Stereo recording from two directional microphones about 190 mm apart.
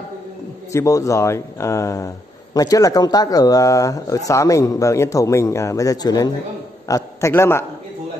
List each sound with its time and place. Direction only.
0.7 s a man's voice: 15° left (ahead or behind)